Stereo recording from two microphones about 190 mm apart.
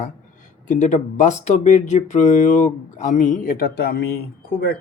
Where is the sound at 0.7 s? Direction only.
40° left (ahead or behind).